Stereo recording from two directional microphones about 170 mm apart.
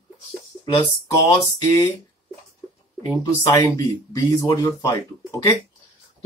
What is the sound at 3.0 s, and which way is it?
Speech, 20° left (ahead or behind).